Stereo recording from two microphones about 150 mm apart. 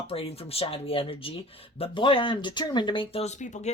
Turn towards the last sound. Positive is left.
turn(degrees=50)  # may be behind; listen again after turning